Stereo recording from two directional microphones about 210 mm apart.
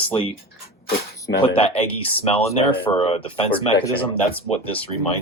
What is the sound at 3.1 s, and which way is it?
Speech, 25° left (ahead or behind).